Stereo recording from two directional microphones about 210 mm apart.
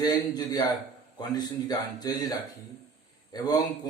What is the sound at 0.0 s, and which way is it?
A man's voice, 20° left (ahead or behind).